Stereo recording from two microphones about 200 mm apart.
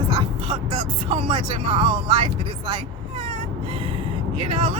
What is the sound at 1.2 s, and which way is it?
Speech, 25° right (ahead or behind).